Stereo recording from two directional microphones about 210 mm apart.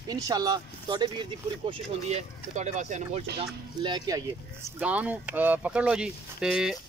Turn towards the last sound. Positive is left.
turn(degrees=-5)  # may be behind; listen again after turning